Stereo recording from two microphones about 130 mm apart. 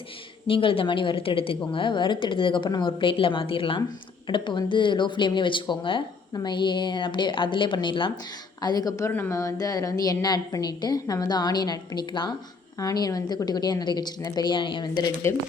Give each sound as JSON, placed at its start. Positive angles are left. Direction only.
{"t": 0.4, "sound": "speech", "side_deg": 45}
{"t": 8.6, "sound": "a woman's voice", "side_deg": 30}